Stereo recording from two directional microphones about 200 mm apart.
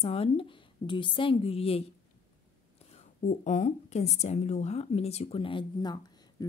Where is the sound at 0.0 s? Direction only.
30° left (ahead or behind).